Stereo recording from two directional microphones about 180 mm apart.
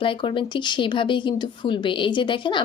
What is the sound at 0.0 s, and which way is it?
A woman's voice, 25° left (ahead or behind).